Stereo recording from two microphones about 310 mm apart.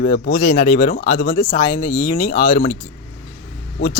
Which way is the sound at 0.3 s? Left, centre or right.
Left.